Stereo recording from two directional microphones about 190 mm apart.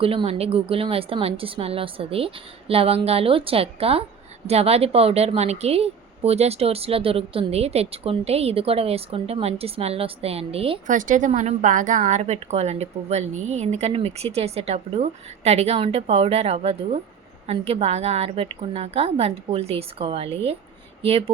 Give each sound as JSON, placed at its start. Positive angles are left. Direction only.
{"t": 0.0, "sound": "a woman's voice", "side_deg": -30}